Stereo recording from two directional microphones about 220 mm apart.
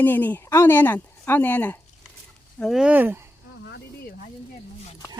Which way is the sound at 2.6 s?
Centre (ahead or behind).